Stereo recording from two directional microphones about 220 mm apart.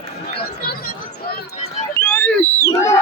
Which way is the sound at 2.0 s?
5° left (ahead or behind).